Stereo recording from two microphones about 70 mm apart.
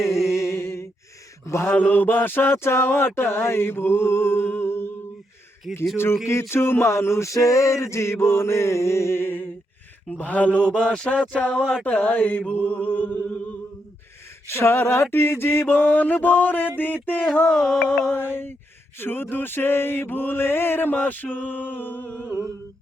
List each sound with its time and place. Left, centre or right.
0.3 s music: left
1.5 s male singing: left
1.7 s male singing: left
3.2 s a sound: left
5.7 s music: centre
6.5 s male singing: left
10.1 s speech: left
11.8 s a sound: left
12.6 s music: left
14.4 s male singing: left
15.1 s a sound: left
17.5 s music: centre
18.1 s male singing: left
18.9 s a sound: left